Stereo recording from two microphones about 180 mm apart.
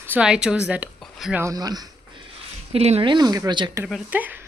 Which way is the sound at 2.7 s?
35° right (ahead or behind).